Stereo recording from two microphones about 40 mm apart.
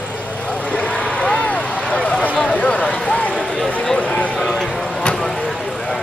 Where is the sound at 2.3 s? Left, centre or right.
Left.